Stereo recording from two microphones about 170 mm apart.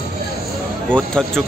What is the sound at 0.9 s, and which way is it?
Speech, 5° left (ahead or behind).